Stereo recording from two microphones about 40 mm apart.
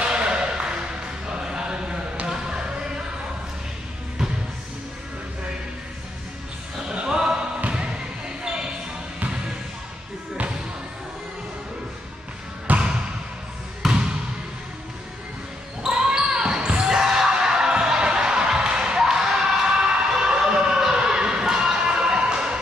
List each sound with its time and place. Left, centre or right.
0.0 s ping: right
1.3 s a sound: centre
2.2 s basketball bounce: centre
6.9 s music: centre
7.6 s basketball bounce: right
12.7 s basketball bounce: right
13.8 s basketball bounce: centre
15.9 s basketball bounce: right
20.8 s a sound: centre